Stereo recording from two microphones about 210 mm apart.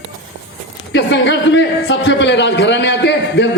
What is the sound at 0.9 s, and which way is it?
A man's voice, 60° left (ahead or behind).